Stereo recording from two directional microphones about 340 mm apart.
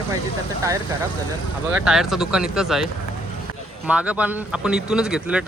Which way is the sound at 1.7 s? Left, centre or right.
Centre.